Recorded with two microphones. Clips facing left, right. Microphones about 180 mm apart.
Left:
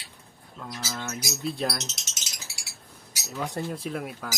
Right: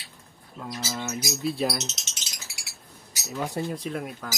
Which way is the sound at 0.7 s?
10° right (ahead or behind).